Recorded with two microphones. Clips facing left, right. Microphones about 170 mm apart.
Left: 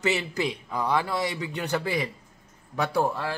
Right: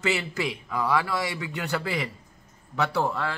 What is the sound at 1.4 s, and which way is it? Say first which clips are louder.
Speech: left 1 dB; 30° left (ahead or behind).